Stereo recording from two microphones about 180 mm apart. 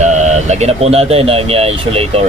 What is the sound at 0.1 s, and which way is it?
Speech, 40° right (ahead or behind).